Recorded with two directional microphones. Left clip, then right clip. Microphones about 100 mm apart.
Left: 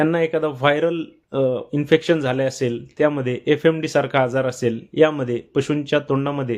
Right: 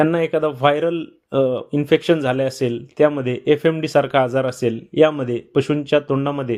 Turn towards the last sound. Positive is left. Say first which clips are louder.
# right 1 dB
turn(degrees=-20)  # may be behind; listen again after turning